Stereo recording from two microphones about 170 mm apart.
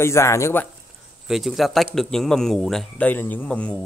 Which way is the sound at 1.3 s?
Centre (ahead or behind).